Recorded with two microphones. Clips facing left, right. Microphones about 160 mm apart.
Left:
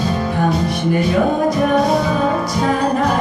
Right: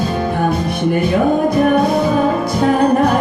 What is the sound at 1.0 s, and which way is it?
Music, 55° right (ahead or behind).